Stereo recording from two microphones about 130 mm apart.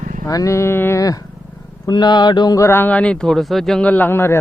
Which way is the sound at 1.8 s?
35° left (ahead or behind).